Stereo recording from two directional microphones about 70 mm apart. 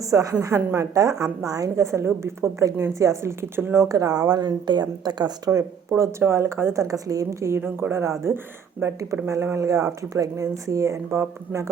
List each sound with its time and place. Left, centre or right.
0.0 s a woman's voice: right
3.8 s a woman's voice: right
6.0 s a woman's voice: right
6.8 s speech: right
9.2 s a woman's voice: right
9.6 s speech: right